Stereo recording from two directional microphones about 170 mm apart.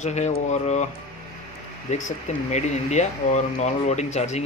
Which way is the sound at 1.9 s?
40° left (ahead or behind).